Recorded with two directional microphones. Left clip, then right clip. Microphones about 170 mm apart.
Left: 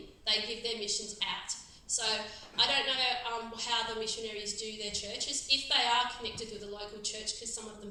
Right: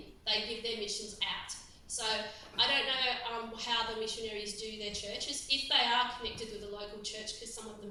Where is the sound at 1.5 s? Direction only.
40° left (ahead or behind).